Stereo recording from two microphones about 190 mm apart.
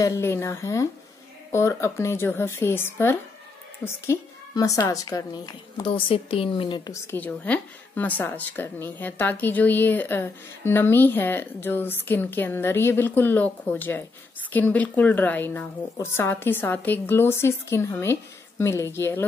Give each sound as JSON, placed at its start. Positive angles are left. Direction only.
{"t": 0.0, "sound": "a woman's voice", "side_deg": 15}
{"t": 7.1, "sound": "speech", "side_deg": 10}